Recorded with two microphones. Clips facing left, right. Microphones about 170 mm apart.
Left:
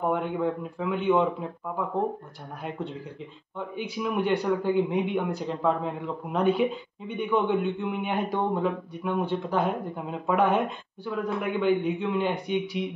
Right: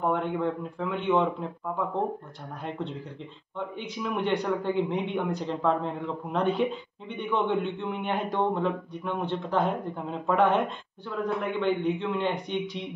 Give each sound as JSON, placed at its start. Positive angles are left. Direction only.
{"t": 0.1, "sound": "a man's voice", "side_deg": 5}
{"t": 3.5, "sound": "a man's voice", "side_deg": 5}